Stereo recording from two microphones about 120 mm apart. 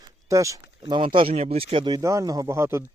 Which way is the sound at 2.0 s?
25° right (ahead or behind).